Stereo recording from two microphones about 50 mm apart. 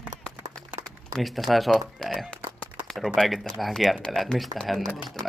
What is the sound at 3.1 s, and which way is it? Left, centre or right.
Speech, centre.